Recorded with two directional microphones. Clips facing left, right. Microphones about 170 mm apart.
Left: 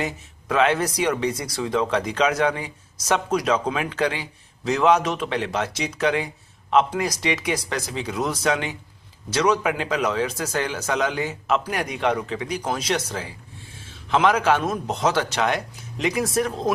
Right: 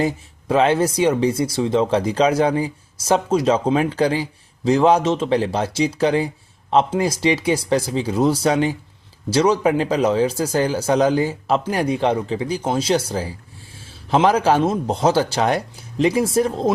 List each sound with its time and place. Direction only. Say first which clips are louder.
0.0 s speech: right 7 dB; 30° right (ahead or behind)